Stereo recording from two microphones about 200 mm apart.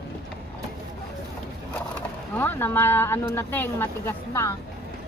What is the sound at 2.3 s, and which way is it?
Speech, 10° left (ahead or behind).